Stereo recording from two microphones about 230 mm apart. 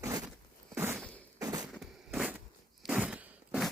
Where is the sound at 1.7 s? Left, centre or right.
Centre.